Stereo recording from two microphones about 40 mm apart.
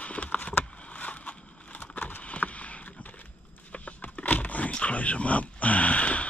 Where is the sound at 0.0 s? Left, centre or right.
Left.